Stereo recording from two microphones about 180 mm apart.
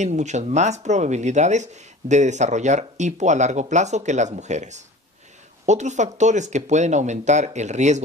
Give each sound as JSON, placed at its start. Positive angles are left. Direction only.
{"t": 0.0, "sound": "speech", "side_deg": -40}